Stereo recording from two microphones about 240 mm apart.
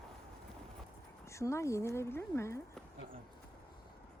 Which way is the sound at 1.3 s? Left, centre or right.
Centre.